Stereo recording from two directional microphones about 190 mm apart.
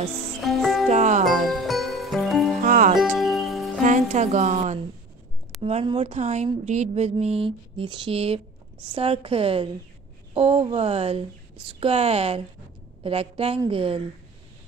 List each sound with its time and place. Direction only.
0.4 s music: centre (ahead or behind)
0.8 s music: 40° right (ahead or behind)
1.5 s music: centre (ahead or behind)
2.6 s music: 40° right (ahead or behind)
3.0 s music: centre (ahead or behind)
3.8 s a woman's voice: 40° right (ahead or behind)